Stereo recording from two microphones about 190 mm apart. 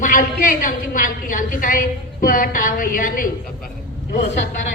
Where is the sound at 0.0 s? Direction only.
45° left (ahead or behind).